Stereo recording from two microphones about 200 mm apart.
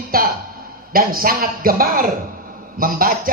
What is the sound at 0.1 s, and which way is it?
A man's voice, 45° right (ahead or behind).